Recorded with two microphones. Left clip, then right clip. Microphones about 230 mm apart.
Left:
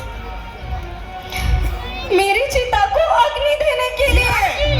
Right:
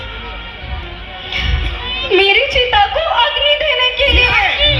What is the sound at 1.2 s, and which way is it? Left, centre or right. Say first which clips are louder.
Music: right 7 dB; left.